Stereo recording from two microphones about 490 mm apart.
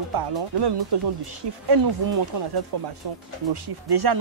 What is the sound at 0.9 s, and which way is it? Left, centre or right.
Speech, right.